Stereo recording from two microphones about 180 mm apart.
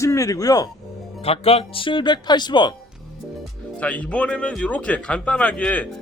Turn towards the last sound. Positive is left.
turn(degrees=5)  # may be behind; listen again after turning